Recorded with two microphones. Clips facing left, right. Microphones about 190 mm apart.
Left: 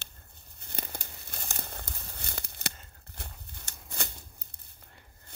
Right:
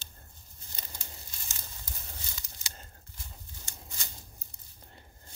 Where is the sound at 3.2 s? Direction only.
65° left (ahead or behind).